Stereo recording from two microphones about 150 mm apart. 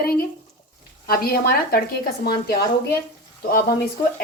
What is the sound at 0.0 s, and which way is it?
Speech, 85° left.